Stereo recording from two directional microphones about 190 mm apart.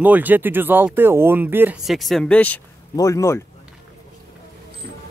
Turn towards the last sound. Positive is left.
turn(degrees=15)  # may be behind; listen again after turning